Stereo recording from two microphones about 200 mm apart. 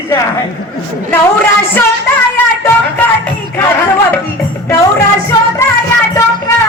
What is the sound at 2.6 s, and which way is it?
Speech, 10° left (ahead or behind).